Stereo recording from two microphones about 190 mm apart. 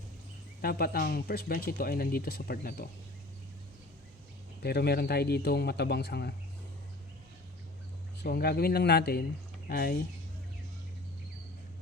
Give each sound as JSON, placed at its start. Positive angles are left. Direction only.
{"t": 0.6, "sound": "speech", "side_deg": 50}
{"t": 4.6, "sound": "speech", "side_deg": 55}
{"t": 8.2, "sound": "speech", "side_deg": 55}